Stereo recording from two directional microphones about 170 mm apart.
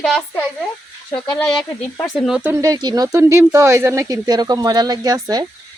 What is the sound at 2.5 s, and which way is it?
Speech, 20° right (ahead or behind).